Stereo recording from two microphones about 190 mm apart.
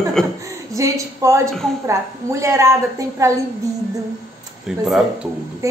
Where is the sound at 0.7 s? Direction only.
15° right (ahead or behind).